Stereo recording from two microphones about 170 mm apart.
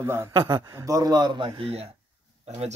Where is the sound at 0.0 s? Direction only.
15° right (ahead or behind).